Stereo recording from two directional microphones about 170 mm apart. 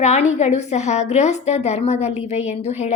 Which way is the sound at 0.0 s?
40° left (ahead or behind).